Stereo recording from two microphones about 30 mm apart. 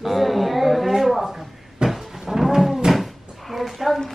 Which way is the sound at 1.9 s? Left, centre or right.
Centre.